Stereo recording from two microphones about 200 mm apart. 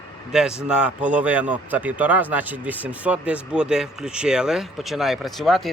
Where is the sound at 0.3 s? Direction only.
5° right (ahead or behind).